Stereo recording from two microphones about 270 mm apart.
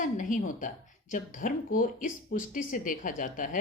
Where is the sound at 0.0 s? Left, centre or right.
Left.